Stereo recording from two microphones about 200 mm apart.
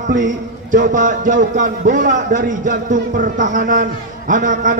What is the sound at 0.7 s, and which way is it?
A man's voice, 40° right (ahead or behind).